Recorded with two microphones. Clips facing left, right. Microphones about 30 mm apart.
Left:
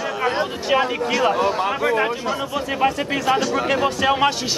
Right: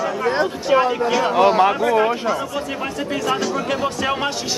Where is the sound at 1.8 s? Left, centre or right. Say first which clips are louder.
Right 2 dB; centre.